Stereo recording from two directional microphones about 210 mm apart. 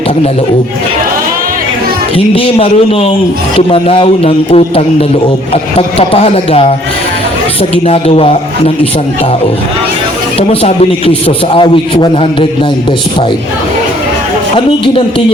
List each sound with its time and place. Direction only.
2.1 s a man's voice: 25° left (ahead or behind)
7.9 s a man's voice: 30° left (ahead or behind)
10.5 s a man's voice: 30° left (ahead or behind)